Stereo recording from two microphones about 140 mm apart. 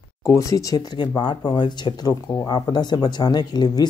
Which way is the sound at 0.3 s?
25° left (ahead or behind).